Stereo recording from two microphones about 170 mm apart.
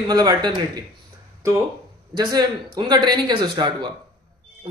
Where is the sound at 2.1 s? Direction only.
25° right (ahead or behind).